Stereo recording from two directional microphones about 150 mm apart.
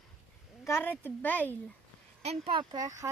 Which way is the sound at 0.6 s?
15° left (ahead or behind).